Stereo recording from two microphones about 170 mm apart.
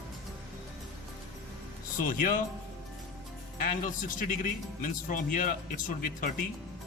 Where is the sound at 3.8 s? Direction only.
50° left (ahead or behind).